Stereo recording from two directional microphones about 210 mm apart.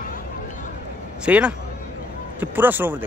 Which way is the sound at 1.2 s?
5° right (ahead or behind).